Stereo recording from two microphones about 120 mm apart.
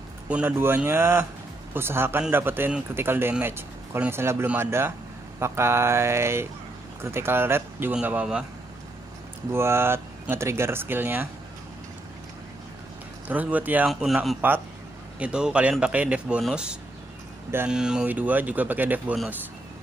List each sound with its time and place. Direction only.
0.3 s speech: 15° right (ahead or behind)
9.5 s speech: 20° right (ahead or behind)
13.3 s speech: 15° right (ahead or behind)